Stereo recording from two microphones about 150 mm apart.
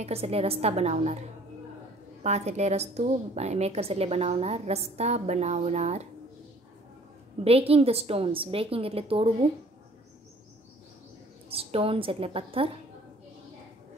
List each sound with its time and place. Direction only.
0.0 s a woman's voice: 40° right (ahead or behind)
2.2 s a woman's voice: 45° right (ahead or behind)
7.4 s a woman's voice: 40° right (ahead or behind)
11.4 s a woman's voice: 40° right (ahead or behind)